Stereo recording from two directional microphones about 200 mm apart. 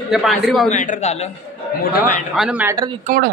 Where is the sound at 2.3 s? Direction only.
5° right (ahead or behind).